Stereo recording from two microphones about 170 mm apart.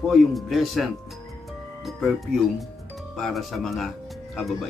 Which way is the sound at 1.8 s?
Centre (ahead or behind).